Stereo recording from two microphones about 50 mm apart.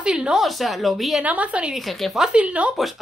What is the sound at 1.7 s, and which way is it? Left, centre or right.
Speech, centre.